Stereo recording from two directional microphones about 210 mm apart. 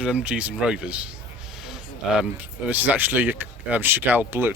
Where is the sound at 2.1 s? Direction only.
5° right (ahead or behind).